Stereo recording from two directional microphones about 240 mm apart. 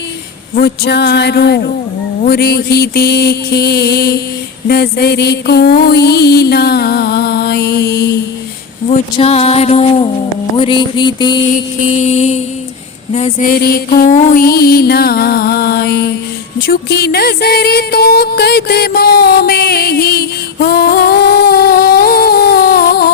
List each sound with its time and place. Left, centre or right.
0.5 s mantra: left
2.2 s music: left
4.7 s mantra: left
8.9 s a sound: left
13.1 s music: left